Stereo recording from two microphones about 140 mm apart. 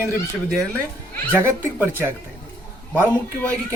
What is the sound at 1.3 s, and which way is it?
Speech, 20° right (ahead or behind).